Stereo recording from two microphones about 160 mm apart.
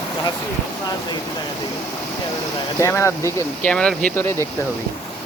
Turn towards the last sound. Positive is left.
turn(degrees=15)  # may be behind; listen again after turning